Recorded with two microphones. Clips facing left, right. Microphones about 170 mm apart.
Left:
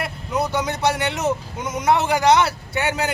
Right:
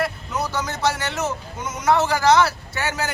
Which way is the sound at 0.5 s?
20° left (ahead or behind).